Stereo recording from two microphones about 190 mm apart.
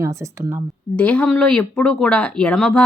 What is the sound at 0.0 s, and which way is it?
Speech, 15° right (ahead or behind).